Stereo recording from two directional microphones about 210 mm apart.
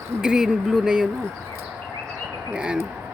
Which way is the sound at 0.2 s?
5° right (ahead or behind).